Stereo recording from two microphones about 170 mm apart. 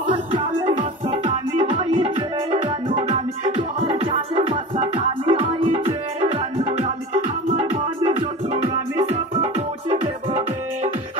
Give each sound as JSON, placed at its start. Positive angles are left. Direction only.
{"t": 1.2, "sound": "music", "side_deg": -35}
{"t": 7.4, "sound": "music", "side_deg": -35}